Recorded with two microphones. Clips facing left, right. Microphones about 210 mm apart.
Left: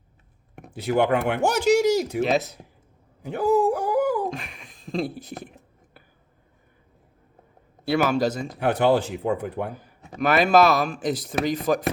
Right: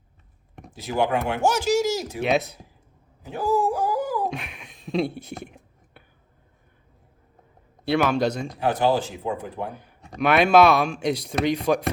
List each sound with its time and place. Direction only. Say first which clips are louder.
0.7 s speech: left 3 dB; 60° left (ahead or behind)
2.2 s speech: even; centre (ahead or behind)
3.3 s speech: left 3 dB; 60° left (ahead or behind)
4.3 s speech: even; centre (ahead or behind)
7.9 s speech: even; 5° left (ahead or behind)
8.5 s speech: left 3 dB; 60° left (ahead or behind)
9.7 s speech: even; centre (ahead or behind)